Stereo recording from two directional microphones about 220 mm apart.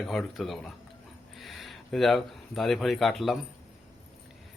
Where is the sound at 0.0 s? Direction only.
Centre (ahead or behind).